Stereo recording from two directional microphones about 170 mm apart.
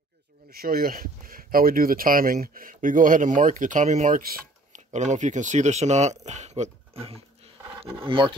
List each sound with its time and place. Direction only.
0.5 s speech: 60° right (ahead or behind); by 4.2 s 40° right (ahead or behind)
4.2 s speech: 55° right (ahead or behind); by 8.4 s 30° right (ahead or behind)